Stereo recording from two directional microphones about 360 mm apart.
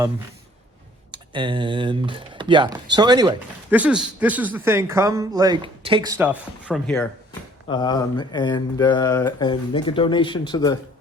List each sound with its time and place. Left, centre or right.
1.1 s speech: centre